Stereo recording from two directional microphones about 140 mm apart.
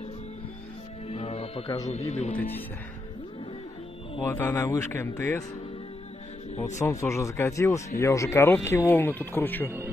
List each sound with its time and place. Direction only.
1.0 s music: 45° left (ahead or behind)
1.9 s speech: 50° left (ahead or behind)
2.3 s speech: 15° left (ahead or behind)
4.2 s speech: 15° left (ahead or behind)
6.8 s speech: 20° left (ahead or behind)